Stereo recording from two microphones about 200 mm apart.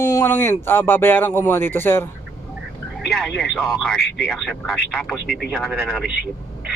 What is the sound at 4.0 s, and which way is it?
Speech, 55° left (ahead or behind).